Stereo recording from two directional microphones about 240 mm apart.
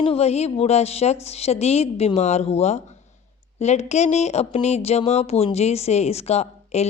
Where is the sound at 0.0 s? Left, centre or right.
Left.